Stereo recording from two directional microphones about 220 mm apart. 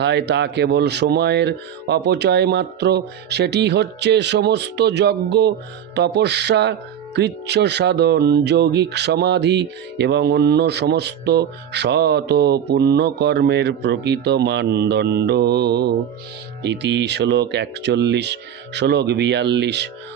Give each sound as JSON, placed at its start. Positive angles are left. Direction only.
{"t": 0.0, "sound": "speech", "side_deg": -50}